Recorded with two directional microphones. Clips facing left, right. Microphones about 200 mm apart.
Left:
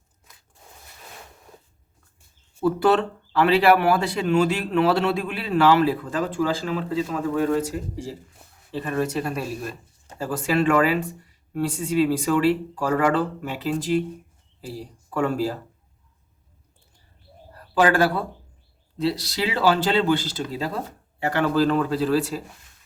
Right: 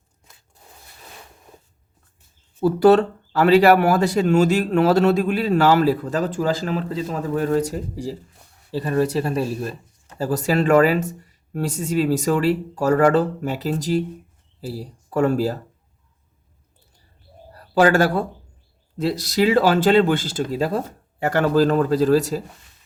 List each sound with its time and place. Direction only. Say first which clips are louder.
2.6 s speech: right 5 dB; 40° right (ahead or behind)
8.7 s speech: right 4 dB; 35° right (ahead or behind)
17.5 s speech: right 4 dB; 40° right (ahead or behind)